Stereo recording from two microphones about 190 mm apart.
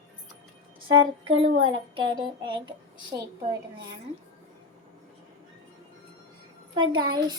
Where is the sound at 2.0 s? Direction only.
25° right (ahead or behind).